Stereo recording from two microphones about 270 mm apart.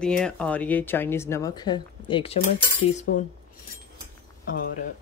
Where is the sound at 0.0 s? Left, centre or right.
Centre; by 3.3 s left.